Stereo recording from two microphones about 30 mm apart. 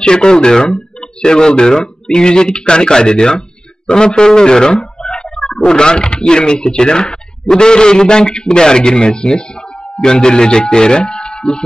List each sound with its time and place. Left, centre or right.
0.0 s speech: left
4.7 s a sound: left
5.7 s speech: left